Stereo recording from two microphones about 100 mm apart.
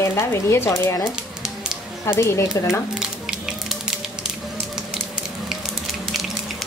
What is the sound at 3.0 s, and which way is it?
Music, 5° right (ahead or behind).